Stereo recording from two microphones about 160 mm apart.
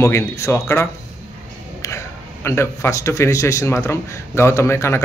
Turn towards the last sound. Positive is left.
turn(degrees=15)  # may be behind; listen again after turning